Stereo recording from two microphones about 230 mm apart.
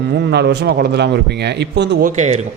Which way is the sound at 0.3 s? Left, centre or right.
Right.